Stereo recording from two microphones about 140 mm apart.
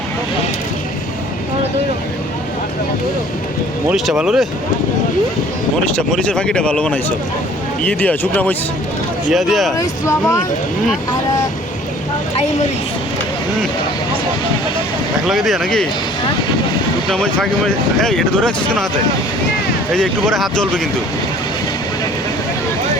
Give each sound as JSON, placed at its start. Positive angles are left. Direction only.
{"t": 3.8, "sound": "speech", "side_deg": -5}
{"t": 6.0, "sound": "speech", "side_deg": 5}
{"t": 9.3, "sound": "speech", "side_deg": 0}
{"t": 9.7, "sound": "speech", "side_deg": 20}
{"t": 15.3, "sound": "speech", "side_deg": 0}
{"t": 17.1, "sound": "speech", "side_deg": 5}
{"t": 19.9, "sound": "speech", "side_deg": 5}